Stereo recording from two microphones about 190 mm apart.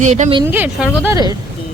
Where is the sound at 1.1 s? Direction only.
20° right (ahead or behind).